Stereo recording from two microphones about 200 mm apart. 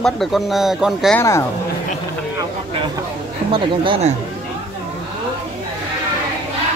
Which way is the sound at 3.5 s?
25° right (ahead or behind).